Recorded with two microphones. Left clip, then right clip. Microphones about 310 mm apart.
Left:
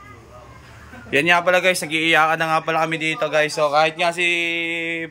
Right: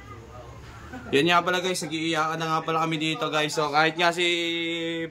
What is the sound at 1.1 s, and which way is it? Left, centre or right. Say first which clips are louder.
Speech: left 5 dB; centre.